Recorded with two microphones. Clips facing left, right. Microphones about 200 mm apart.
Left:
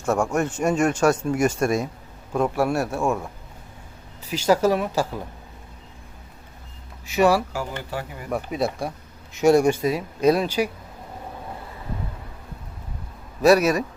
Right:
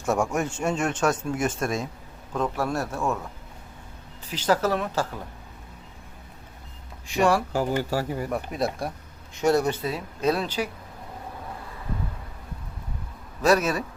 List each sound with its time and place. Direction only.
0.0 s speech: centre (ahead or behind)
4.3 s speech: 10° left (ahead or behind)
7.1 s speech: 5° left (ahead or behind)
7.5 s speech: 40° right (ahead or behind)
8.3 s speech: centre (ahead or behind)
9.4 s speech: 10° left (ahead or behind)
13.4 s speech: 10° left (ahead or behind)